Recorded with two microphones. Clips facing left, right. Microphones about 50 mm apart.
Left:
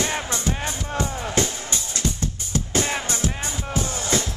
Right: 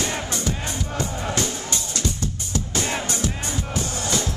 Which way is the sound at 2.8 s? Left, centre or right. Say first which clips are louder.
Even; centre.